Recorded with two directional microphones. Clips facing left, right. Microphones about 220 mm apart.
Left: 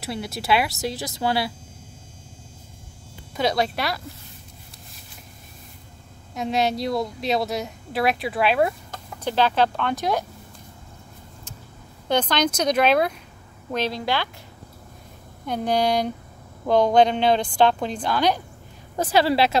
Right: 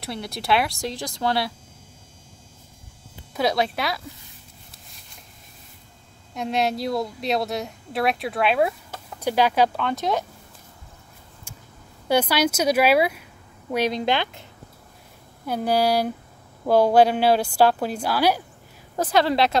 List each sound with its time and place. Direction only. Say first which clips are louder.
0.0 s a woman's voice: left 1 dB; 5° left (ahead or behind)
3.3 s a woman's voice: even; centre (ahead or behind)
6.3 s a woman's voice: left 1 dB; centre (ahead or behind)
9.8 s a woman's voice: even; centre (ahead or behind)
12.1 s speech: right 1 dB; 10° right (ahead or behind)
15.4 s speech: right 1 dB; 5° right (ahead or behind)
18.9 s a woman's voice: left 1 dB; 5° left (ahead or behind)